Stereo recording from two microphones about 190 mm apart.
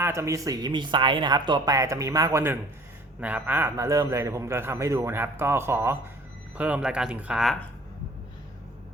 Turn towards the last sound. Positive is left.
turn(degrees=-5)  # may be behind; listen again after turning